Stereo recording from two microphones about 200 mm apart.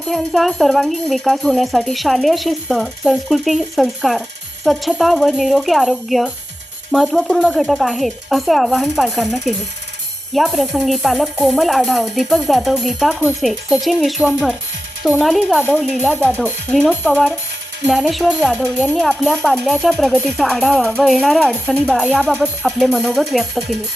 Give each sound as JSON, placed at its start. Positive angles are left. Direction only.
{"t": 0.1, "sound": "speech", "side_deg": 0}